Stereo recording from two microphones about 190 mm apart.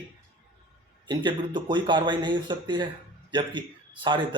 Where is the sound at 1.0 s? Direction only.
25° right (ahead or behind).